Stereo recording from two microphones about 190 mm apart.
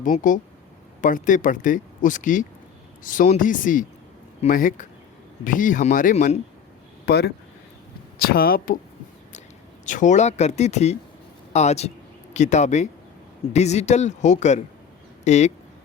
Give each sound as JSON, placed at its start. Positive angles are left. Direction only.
{"t": 0.0, "sound": "speech", "side_deg": 45}
{"t": 7.0, "sound": "speech", "side_deg": 55}
{"t": 9.8, "sound": "speech", "side_deg": 40}